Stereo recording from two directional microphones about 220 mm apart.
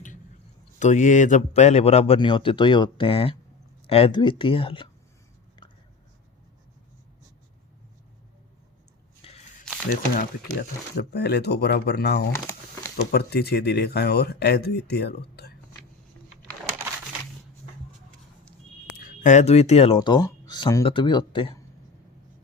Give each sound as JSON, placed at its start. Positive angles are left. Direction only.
{"t": 0.8, "sound": "speech", "side_deg": 35}
{"t": 9.2, "sound": "a sound", "side_deg": 25}
{"t": 10.6, "sound": "speech", "side_deg": 45}
{"t": 19.0, "sound": "speech", "side_deg": 35}
{"t": 20.0, "sound": "speech", "side_deg": 20}